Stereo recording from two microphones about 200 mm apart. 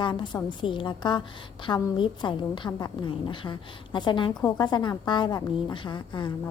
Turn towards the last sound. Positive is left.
turn(degrees=25)  # may be behind; listen again after turning